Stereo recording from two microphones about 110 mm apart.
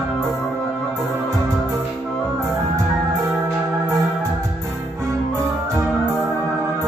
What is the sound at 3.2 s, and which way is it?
Organ, centre (ahead or behind).